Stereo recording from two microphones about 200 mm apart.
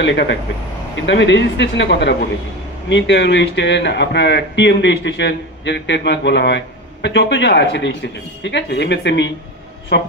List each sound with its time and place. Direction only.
0.0 s speech: 60° left (ahead or behind)